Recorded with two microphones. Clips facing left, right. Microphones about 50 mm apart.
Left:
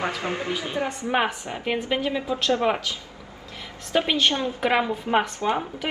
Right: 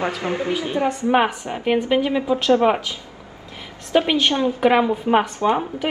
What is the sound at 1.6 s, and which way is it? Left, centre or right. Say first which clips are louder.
Speech: right 7 dB; centre.